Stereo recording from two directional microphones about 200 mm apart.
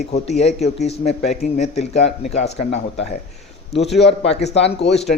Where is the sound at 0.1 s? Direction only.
35° left (ahead or behind).